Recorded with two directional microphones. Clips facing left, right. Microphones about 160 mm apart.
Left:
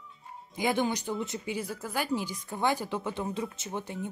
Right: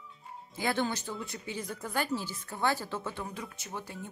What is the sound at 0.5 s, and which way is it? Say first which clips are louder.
Speech: left 3 dB; 15° left (ahead or behind).